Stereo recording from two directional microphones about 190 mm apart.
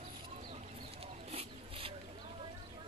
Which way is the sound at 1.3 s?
30° right (ahead or behind).